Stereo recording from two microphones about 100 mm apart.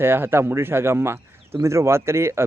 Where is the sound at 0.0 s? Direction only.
20° right (ahead or behind).